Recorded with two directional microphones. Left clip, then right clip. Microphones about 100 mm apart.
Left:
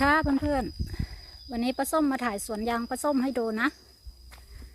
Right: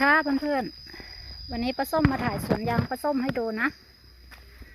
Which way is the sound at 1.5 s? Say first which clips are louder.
Even; 50° left (ahead or behind).